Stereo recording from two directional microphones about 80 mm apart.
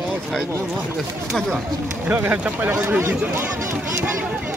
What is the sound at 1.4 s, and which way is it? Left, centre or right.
Speech, centre.